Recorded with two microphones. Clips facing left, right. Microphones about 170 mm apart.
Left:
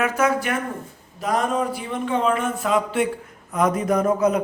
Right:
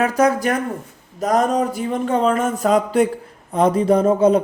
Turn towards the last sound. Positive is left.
turn(degrees=-30)  # may be behind; listen again after turning